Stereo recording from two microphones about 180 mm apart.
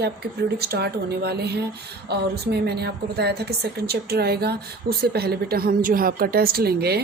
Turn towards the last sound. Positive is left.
turn(degrees=-60)  # may be behind; listen again after turning